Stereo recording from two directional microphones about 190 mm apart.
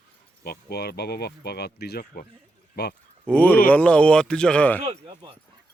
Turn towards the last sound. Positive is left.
turn(degrees=5)  # may be behind; listen again after turning